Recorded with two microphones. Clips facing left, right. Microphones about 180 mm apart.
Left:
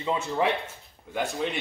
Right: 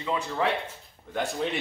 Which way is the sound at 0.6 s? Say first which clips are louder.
Right 1 dB; centre (ahead or behind).